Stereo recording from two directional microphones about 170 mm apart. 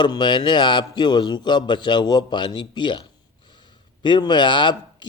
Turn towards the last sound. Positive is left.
turn(degrees=25)  # may be behind; listen again after turning